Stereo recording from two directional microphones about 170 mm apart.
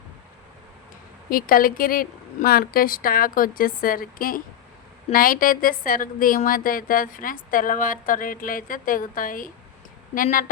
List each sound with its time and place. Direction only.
1.3 s a woman's voice: 55° left (ahead or behind)